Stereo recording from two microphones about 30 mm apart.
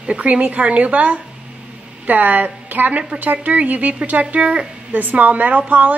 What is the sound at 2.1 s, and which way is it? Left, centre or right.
A woman's voice, right.